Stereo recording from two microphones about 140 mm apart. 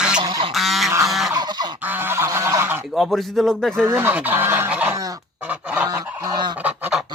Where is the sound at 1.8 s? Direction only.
15° right (ahead or behind).